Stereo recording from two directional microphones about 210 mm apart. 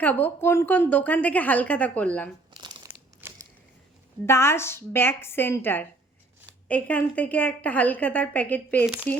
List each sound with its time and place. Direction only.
0.0 s a woman's voice: 10° left (ahead or behind)
2.5 s crumpling: 20° right (ahead or behind)
3.2 s a sound: 10° right (ahead or behind)
4.3 s a woman's voice: 10° left (ahead or behind)